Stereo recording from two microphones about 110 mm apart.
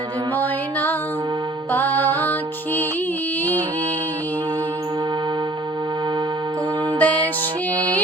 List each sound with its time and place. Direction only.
0.3 s music: 15° left (ahead or behind)
7.0 s music: 15° left (ahead or behind)